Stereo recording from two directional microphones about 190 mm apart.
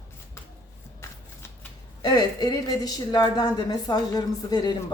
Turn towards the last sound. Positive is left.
turn(degrees=20)  # may be behind; listen again after turning